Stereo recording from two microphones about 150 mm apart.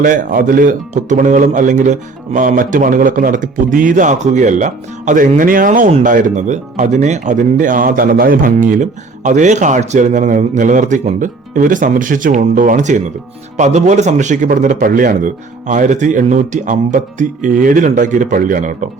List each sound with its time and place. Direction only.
0.0 s speech: 60° right (ahead or behind)